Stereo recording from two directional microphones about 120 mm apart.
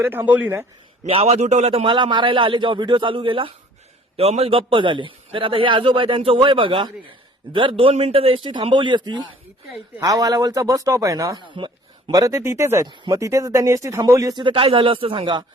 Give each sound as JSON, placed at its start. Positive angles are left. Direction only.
{"t": 0.0, "sound": "speech", "side_deg": -15}
{"t": 1.0, "sound": "a man's voice", "side_deg": -55}
{"t": 4.2, "sound": "a man's voice", "side_deg": -55}
{"t": 11.3, "sound": "a sound", "side_deg": -40}
{"t": 12.1, "sound": "speech", "side_deg": -30}
{"t": 14.4, "sound": "a man's voice", "side_deg": -50}